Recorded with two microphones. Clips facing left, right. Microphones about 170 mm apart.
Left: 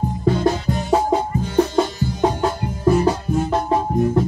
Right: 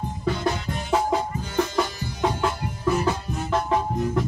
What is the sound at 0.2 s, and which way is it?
Music, 35° left (ahead or behind).